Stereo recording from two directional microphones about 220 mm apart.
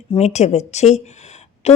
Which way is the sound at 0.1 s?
30° left (ahead or behind).